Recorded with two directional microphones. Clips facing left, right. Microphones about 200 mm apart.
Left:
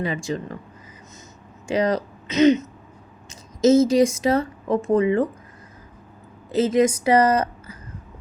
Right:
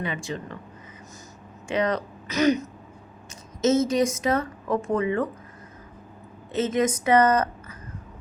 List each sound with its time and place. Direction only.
0.0 s a woman's voice: 40° left (ahead or behind)
1.7 s a woman's voice: 35° left (ahead or behind)
2.2 s throat clearing: 20° left (ahead or behind)
3.6 s a woman's voice: 30° left (ahead or behind)
6.5 s a woman's voice: 35° left (ahead or behind)